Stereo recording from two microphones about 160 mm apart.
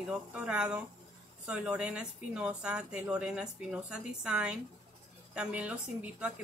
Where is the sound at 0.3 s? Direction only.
5° right (ahead or behind).